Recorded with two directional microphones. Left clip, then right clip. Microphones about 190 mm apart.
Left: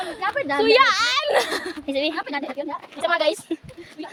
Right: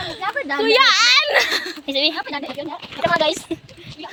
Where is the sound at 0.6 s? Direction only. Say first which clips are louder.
Right 3 dB; 10° left (ahead or behind); by 1.8 s 25° left (ahead or behind).